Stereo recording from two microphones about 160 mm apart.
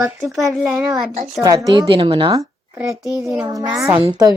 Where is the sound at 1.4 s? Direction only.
20° right (ahead or behind).